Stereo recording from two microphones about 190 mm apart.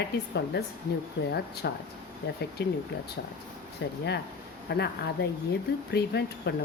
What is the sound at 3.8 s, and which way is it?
Speech, 65° left (ahead or behind).